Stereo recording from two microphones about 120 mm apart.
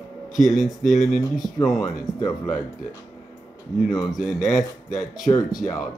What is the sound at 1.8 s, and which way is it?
Speech, 30° left (ahead or behind).